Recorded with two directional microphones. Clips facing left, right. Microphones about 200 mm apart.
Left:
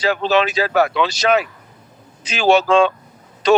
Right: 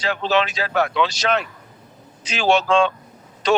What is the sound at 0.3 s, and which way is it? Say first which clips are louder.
Speech: left 2 dB; 5° left (ahead or behind).